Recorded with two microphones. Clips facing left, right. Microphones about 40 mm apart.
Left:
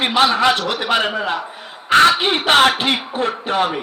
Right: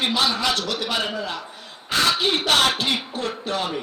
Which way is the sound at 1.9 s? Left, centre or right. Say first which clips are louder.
Left 10 dB; left.